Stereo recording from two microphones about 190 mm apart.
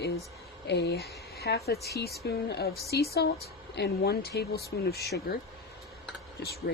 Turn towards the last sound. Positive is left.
turn(degrees=55)  # may be behind; listen again after turning